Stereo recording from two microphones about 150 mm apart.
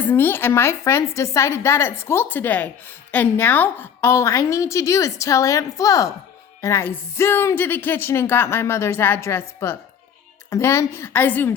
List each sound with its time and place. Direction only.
0.0 s a woman's voice: 15° left (ahead or behind)